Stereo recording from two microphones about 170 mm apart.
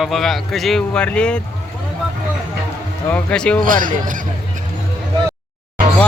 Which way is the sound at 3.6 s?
55° right (ahead or behind).